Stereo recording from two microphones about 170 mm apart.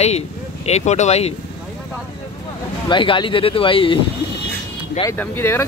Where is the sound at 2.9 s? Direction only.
30° left (ahead or behind).